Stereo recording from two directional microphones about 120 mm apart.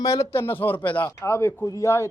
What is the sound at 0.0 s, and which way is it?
Speech, 25° left (ahead or behind).